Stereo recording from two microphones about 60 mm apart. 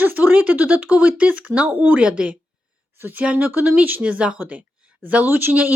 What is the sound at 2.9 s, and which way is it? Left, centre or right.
Speech, right.